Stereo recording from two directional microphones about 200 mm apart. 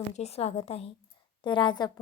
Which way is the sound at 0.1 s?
30° left (ahead or behind).